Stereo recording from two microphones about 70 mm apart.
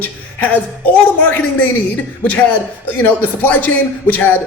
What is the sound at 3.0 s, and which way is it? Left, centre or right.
A woman's voice, left.